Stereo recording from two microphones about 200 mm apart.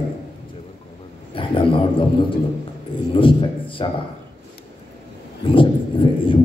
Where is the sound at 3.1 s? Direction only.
25° left (ahead or behind).